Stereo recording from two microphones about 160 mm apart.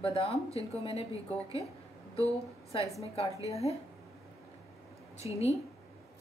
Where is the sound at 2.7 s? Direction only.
40° left (ahead or behind).